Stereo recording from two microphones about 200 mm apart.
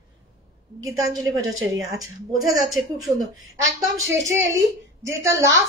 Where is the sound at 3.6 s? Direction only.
15° right (ahead or behind).